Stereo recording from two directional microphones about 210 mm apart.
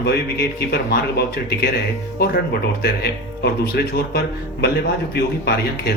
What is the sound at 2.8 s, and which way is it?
Speech, 50° left (ahead or behind).